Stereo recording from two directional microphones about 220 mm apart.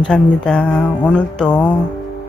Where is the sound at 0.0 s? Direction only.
5° left (ahead or behind).